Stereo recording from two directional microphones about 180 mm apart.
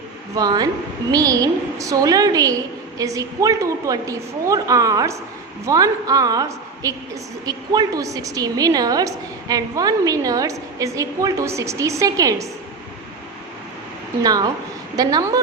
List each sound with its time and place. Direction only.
0.3 s a woman's voice: 20° right (ahead or behind)
14.2 s a woman's voice: 20° right (ahead or behind)